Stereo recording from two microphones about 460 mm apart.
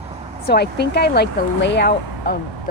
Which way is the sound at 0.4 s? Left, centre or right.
Left.